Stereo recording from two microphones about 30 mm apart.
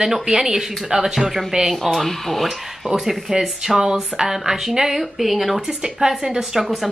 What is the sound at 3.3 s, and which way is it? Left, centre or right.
A woman's voice, right.